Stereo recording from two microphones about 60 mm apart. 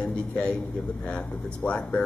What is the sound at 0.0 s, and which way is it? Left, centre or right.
Speech, centre.